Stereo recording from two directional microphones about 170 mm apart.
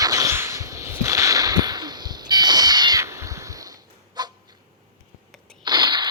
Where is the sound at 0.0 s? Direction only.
20° right (ahead or behind).